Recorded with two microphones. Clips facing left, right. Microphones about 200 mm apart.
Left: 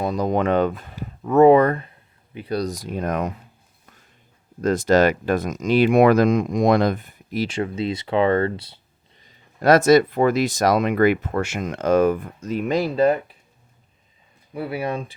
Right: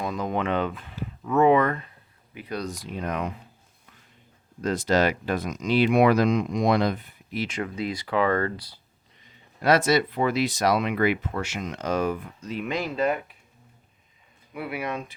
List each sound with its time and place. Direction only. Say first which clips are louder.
0.0 s speech: left 6 dB; 35° left (ahead or behind)
4.6 s speech: left 6 dB; 45° left (ahead or behind); by 8.8 s 25° left (ahead or behind)
9.2 s speech: left 5 dB; 45° left (ahead or behind)
14.5 s speech: left 5 dB; 30° left (ahead or behind)